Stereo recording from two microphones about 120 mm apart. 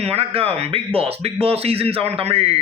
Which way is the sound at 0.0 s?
55° right (ahead or behind).